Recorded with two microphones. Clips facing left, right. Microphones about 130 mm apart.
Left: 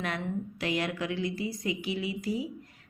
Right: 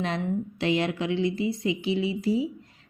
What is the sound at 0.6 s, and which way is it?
A woman's voice, 25° right (ahead or behind).